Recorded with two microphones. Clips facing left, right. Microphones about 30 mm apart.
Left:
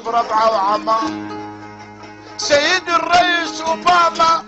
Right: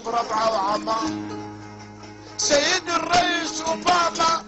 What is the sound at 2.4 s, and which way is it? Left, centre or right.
Music, left.